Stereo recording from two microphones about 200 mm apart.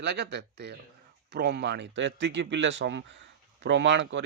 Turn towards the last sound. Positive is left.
turn(degrees=-65)  # may be behind; listen again after turning